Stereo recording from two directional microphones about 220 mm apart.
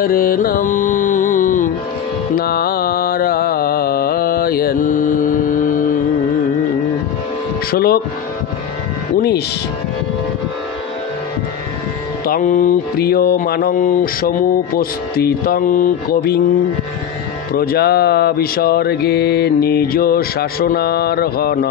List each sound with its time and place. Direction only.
0.0 s music: 40° left (ahead or behind)
7.7 s mantra: 45° left (ahead or behind)
12.3 s mantra: 40° left (ahead or behind)
17.6 s mantra: 45° left (ahead or behind)